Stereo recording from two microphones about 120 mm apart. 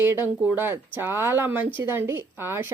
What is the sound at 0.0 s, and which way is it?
Speech, 20° right (ahead or behind).